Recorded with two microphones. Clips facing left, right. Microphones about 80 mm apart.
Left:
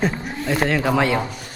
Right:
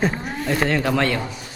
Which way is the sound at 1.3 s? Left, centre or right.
Left.